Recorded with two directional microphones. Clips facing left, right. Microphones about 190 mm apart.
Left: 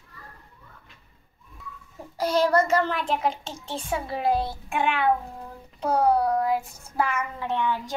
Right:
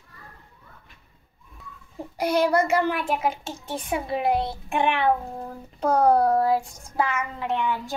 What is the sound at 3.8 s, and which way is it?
A child's voice, 20° right (ahead or behind).